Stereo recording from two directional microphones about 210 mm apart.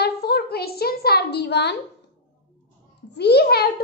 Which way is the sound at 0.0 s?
50° left (ahead or behind).